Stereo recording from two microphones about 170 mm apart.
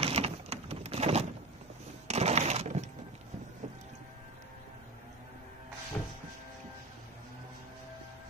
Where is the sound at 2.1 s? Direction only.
40° right (ahead or behind).